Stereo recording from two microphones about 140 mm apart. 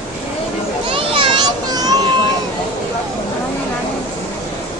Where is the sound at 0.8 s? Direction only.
40° right (ahead or behind).